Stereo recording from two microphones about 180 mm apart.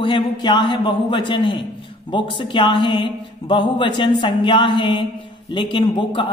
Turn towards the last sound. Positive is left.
turn(degrees=25)  # may be behind; listen again after turning